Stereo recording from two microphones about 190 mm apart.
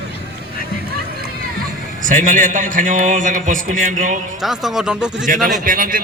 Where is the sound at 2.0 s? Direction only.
45° right (ahead or behind).